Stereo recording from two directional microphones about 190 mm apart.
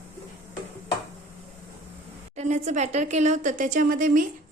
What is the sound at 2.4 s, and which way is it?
Speech, 35° right (ahead or behind).